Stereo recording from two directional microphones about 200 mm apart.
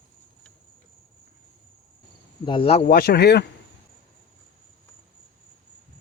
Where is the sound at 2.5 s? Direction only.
25° left (ahead or behind).